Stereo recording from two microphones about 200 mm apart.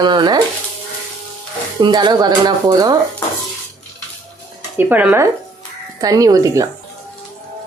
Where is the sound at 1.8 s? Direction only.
20° right (ahead or behind).